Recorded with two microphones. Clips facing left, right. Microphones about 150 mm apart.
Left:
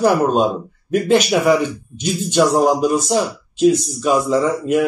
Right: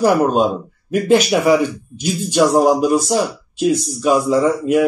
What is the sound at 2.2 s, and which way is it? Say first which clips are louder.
Speech: right 1 dB; 50° right (ahead or behind).